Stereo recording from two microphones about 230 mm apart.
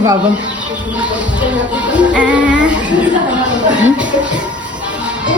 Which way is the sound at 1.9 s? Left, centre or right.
Centre.